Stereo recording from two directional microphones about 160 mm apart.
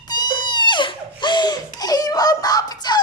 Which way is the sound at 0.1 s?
25° left (ahead or behind).